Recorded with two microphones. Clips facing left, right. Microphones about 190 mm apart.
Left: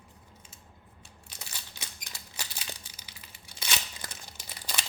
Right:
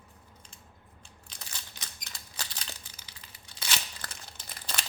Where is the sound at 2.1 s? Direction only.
10° left (ahead or behind).